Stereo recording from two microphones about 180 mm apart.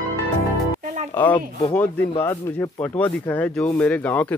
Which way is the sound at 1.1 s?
10° left (ahead or behind).